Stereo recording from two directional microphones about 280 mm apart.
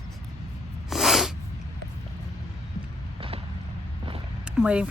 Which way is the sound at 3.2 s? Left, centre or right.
Centre.